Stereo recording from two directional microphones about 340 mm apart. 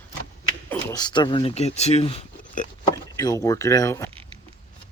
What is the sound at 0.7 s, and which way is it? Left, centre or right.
Speech, centre.